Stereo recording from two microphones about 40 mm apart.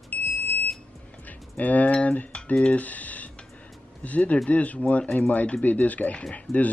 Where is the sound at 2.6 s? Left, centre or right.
Left.